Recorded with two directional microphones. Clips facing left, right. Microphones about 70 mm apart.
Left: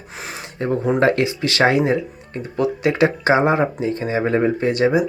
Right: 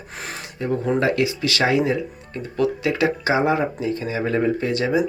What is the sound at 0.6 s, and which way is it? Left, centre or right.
Speech, left.